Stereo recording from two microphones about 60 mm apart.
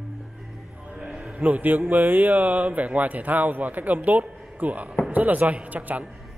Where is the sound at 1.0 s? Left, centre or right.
Centre.